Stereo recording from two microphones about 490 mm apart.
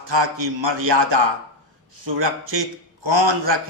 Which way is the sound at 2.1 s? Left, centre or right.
Right.